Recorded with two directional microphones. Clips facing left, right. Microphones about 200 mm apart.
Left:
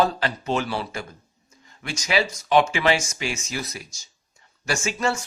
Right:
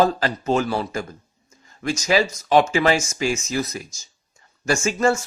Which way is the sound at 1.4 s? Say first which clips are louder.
Right 9 dB; 40° right (ahead or behind).